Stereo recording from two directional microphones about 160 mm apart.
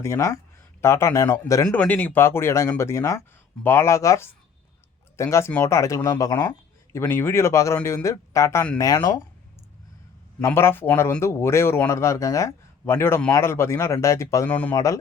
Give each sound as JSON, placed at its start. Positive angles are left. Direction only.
{"t": 0.0, "sound": "speech", "side_deg": 20}
{"t": 1.6, "sound": "speech", "side_deg": 5}
{"t": 7.0, "sound": "speech", "side_deg": 15}
{"t": 10.4, "sound": "speech", "side_deg": 15}